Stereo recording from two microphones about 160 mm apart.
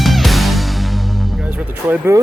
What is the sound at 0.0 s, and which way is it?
Music, centre (ahead or behind).